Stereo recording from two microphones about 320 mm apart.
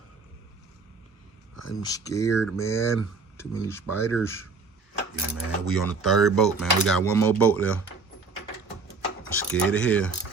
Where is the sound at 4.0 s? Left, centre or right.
Centre.